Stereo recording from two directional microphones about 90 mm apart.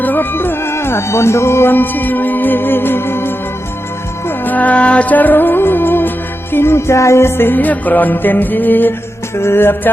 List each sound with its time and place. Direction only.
0.0 s music: 20° left (ahead or behind)